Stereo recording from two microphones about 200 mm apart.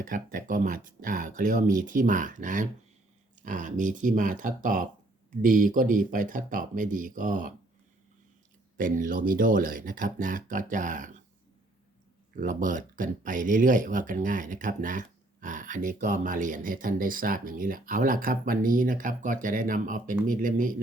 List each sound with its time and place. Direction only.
0.0 s speech: 40° right (ahead or behind)
8.8 s speech: 40° right (ahead or behind)
12.4 s speech: 40° right (ahead or behind)